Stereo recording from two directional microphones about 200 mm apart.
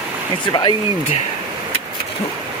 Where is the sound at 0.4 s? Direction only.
25° left (ahead or behind).